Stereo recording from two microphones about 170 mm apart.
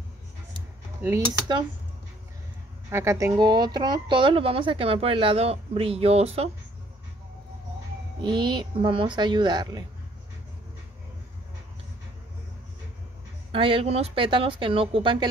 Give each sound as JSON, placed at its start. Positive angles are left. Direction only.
{"t": 2.9, "sound": "a woman's voice", "side_deg": -15}
{"t": 8.2, "sound": "speech", "side_deg": -25}
{"t": 13.5, "sound": "a woman's voice", "side_deg": -30}